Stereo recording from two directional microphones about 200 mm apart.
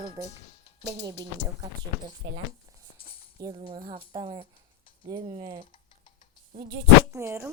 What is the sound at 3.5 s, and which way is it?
Speech, 30° right (ahead or behind).